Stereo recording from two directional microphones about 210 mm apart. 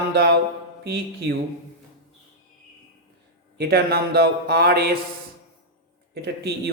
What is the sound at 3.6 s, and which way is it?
A man's voice, 45° right (ahead or behind).